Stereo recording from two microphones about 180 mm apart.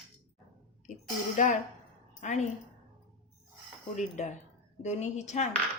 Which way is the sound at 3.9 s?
40° left (ahead or behind).